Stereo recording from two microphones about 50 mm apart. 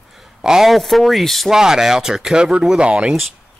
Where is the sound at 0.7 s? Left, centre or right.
Centre.